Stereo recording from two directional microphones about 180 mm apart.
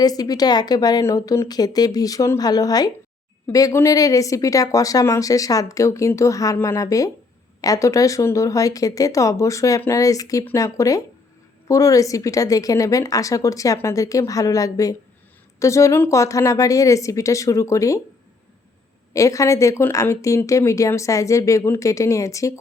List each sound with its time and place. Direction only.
0.0 s a woman's voice: 20° left (ahead or behind)
19.1 s a woman's voice: 15° left (ahead or behind)